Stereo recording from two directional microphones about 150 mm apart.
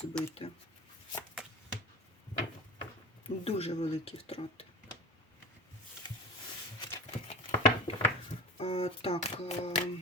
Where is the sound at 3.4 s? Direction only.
45° left (ahead or behind).